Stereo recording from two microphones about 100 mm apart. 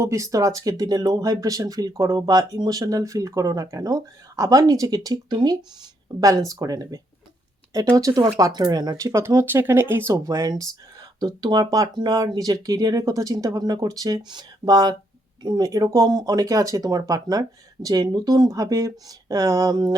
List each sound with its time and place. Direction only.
0.0 s speech: 30° right (ahead or behind)
9.1 s speech: 30° right (ahead or behind)
10.1 s speech: 35° right (ahead or behind)